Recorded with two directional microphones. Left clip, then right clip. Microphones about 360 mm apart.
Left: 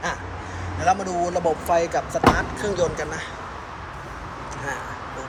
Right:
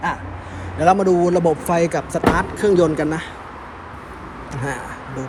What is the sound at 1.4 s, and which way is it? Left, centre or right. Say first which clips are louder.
Speech: right 3 dB; right.